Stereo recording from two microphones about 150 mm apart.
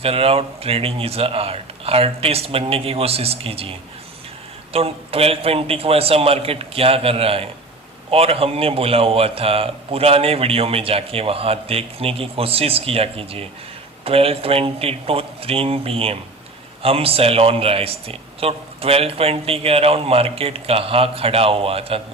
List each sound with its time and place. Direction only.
0.0 s a man's voice: 40° right (ahead or behind)